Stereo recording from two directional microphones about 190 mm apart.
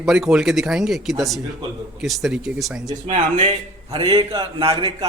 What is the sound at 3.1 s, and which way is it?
A man's voice, 40° right (ahead or behind).